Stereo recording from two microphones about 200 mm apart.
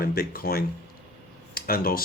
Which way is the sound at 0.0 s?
45° left (ahead or behind).